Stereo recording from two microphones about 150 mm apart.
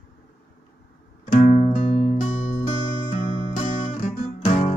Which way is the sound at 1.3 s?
55° left (ahead or behind).